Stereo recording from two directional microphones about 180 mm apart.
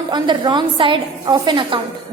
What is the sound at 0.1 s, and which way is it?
A woman's voice, 25° right (ahead or behind).